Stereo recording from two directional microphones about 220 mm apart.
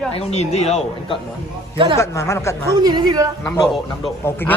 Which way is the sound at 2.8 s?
20° right (ahead or behind).